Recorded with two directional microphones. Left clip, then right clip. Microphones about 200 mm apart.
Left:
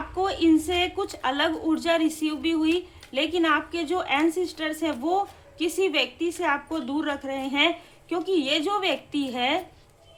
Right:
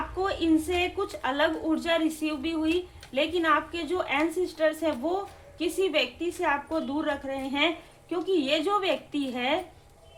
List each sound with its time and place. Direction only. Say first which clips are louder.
0.2 s a woman's voice: left 4 dB; 20° left (ahead or behind)